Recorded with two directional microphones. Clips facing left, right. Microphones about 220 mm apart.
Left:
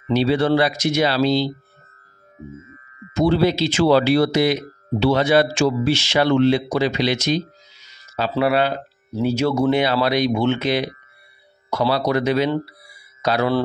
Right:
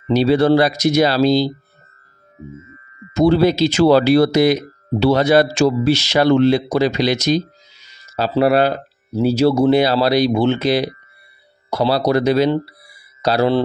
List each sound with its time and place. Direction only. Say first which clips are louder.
0.1 s speech: right 4 dB; 40° right (ahead or behind)
3.2 s speech: right 4 dB; 40° right (ahead or behind)